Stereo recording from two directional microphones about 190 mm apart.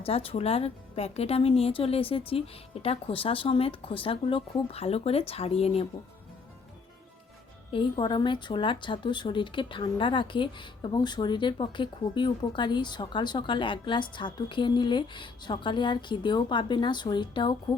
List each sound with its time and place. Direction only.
0.0 s a woman's voice: 30° left (ahead or behind)
7.7 s speech: 25° left (ahead or behind)